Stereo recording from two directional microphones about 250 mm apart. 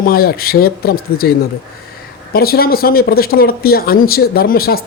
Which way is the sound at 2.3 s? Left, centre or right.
Left.